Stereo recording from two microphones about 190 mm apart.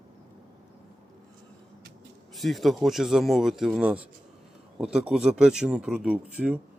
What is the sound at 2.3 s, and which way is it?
A man's voice, centre (ahead or behind).